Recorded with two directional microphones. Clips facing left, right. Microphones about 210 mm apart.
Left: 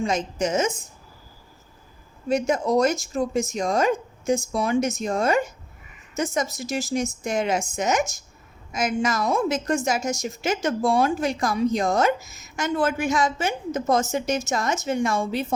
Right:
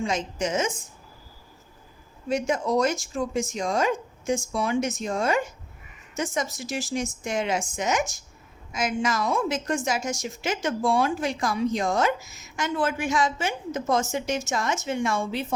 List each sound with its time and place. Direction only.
0.0 s a woman's voice: 40° left (ahead or behind)
2.3 s a woman's voice: 40° left (ahead or behind)